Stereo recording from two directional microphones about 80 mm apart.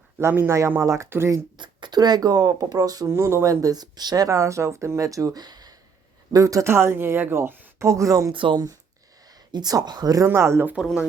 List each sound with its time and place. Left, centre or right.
0.2 s speech: right
1.5 s speech: right
3.1 s speech: right
6.3 s speech: right
7.9 s speech: right
8.3 s speech: right
9.2 s speech: right
10.2 s speech: right